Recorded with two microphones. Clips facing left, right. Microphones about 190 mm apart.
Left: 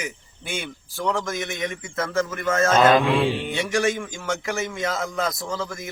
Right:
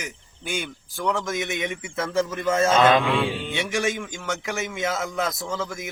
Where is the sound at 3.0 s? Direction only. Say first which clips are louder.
Left 3 dB; 30° left (ahead or behind).